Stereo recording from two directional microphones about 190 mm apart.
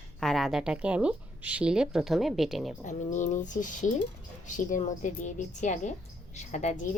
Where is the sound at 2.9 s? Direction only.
40° left (ahead or behind).